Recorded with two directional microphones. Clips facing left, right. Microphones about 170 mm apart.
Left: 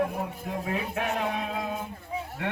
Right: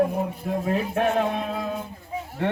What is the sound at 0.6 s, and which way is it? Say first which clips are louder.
Speech: right 7 dB; 40° right (ahead or behind).